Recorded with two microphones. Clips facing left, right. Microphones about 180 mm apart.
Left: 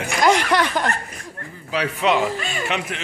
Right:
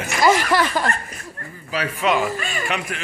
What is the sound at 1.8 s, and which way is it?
Speech, 20° left (ahead or behind).